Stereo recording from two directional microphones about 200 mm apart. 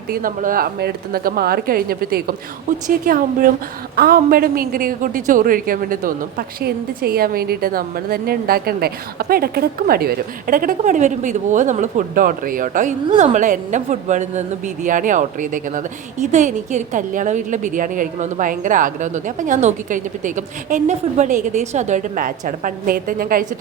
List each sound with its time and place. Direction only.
0.1 s a woman's voice: 45° right (ahead or behind)